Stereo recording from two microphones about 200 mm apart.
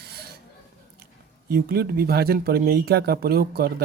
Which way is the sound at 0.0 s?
50° right (ahead or behind).